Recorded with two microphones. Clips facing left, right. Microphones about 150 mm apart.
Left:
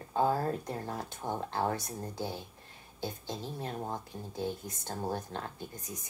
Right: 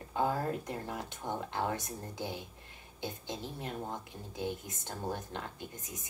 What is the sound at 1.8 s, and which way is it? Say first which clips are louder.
Speech: left 3 dB; 15° right (ahead or behind).